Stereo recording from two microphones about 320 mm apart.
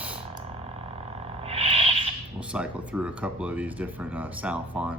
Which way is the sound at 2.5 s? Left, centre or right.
Centre.